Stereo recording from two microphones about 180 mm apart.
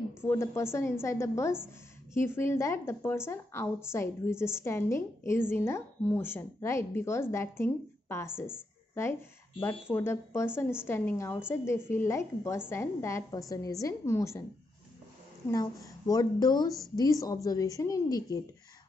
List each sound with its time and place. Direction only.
0.2 s a woman's voice: 15° left (ahead or behind)
15.4 s a woman's voice: 20° left (ahead or behind)